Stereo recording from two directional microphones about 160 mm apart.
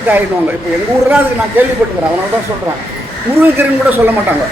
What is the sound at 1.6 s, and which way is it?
Speech, 10° right (ahead or behind).